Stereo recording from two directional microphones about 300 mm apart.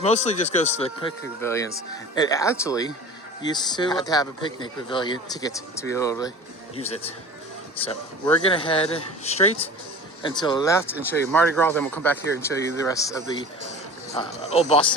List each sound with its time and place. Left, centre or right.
0.0 s speech: left
1.4 s speech: centre
8.4 s speech: centre
14.2 s speech: centre